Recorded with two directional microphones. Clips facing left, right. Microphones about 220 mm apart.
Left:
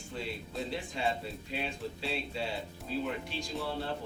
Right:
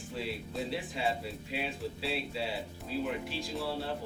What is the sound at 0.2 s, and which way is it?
Speech, 5° right (ahead or behind).